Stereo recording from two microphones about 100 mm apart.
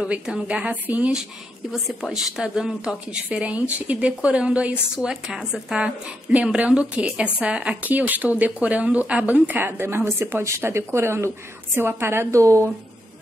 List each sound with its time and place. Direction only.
0.0 s speech: 10° right (ahead or behind)
1.7 s speech: centre (ahead or behind); by 12.7 s 30° right (ahead or behind)